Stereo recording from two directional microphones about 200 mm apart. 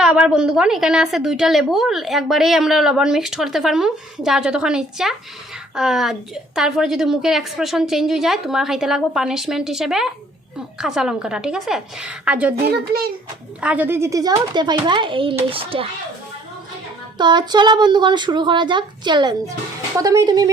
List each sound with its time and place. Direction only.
0.0 s a woman's voice: 5° right (ahead or behind)
12.6 s a child's voice: 50° right (ahead or behind)
13.6 s speech: 5° right (ahead or behind); by 15.9 s 25° right (ahead or behind)
17.2 s speech: 20° right (ahead or behind)